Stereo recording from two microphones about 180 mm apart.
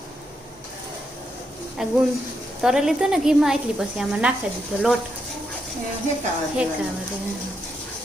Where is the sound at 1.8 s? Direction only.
5° right (ahead or behind).